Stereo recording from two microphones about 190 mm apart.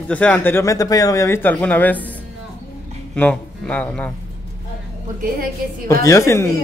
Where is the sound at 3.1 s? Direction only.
5° left (ahead or behind).